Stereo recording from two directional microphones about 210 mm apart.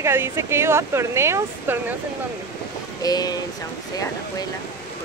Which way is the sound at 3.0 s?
20° left (ahead or behind).